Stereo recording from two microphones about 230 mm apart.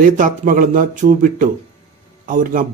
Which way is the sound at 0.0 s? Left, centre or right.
Right.